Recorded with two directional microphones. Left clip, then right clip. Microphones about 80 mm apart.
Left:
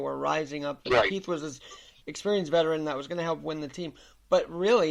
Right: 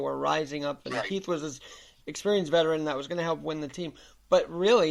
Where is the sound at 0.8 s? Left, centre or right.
Left.